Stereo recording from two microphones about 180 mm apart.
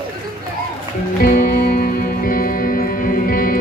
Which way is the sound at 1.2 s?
55° left (ahead or behind).